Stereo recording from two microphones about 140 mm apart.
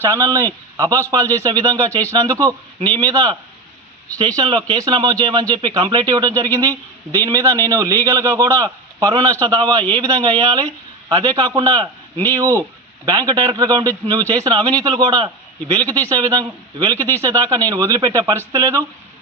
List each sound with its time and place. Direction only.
0.0 s speech: 20° right (ahead or behind)
4.7 s speech: 30° right (ahead or behind)